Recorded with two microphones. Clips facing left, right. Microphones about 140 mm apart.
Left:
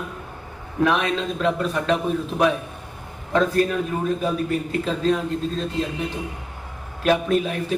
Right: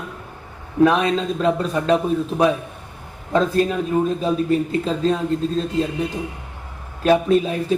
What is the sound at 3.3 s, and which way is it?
A man's voice, 25° right (ahead or behind).